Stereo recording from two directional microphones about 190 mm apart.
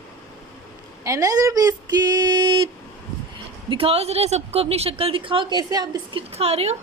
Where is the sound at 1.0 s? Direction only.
15° right (ahead or behind).